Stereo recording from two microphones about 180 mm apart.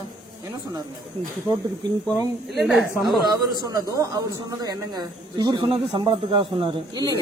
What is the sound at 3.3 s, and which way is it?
Speech, 20° right (ahead or behind).